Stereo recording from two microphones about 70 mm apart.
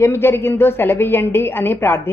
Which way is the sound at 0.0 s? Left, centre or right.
Left.